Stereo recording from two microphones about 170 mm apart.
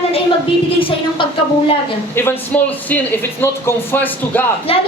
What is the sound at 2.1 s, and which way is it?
Speech, 10° left (ahead or behind).